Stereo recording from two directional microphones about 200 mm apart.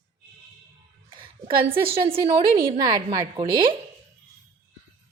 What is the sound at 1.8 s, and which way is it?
A woman's voice, 30° right (ahead or behind).